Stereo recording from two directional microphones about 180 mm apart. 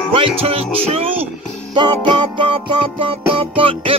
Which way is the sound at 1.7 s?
25° right (ahead or behind).